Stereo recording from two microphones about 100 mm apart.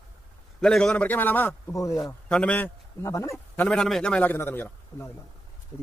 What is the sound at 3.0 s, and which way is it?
Speech, 30° left (ahead or behind).